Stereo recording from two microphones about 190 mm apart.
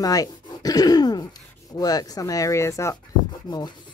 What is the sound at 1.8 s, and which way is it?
Speech, 20° left (ahead or behind).